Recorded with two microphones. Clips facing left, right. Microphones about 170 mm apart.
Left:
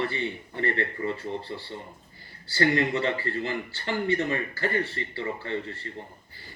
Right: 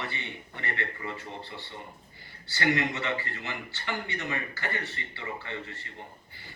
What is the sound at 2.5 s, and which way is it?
Speech, 35° left (ahead or behind).